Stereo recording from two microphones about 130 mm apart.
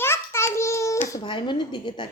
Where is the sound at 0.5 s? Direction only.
25° left (ahead or behind).